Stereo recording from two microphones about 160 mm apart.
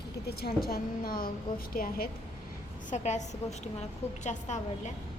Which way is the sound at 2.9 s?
45° left (ahead or behind).